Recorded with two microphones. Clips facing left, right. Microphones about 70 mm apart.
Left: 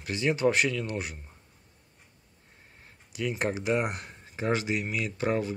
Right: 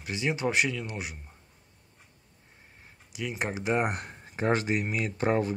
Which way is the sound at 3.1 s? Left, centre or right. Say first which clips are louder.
Left 3 dB; centre.